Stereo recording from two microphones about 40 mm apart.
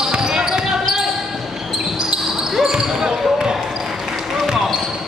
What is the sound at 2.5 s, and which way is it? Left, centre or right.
Basketball bounce, centre.